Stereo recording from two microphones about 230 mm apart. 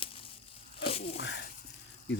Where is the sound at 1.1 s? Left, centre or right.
Left.